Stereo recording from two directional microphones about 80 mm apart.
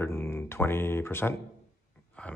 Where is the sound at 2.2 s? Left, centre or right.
Centre.